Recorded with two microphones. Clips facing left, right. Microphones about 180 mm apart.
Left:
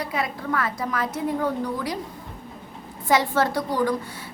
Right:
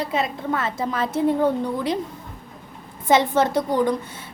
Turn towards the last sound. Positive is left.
turn(degrees=-20)  # may be behind; listen again after turning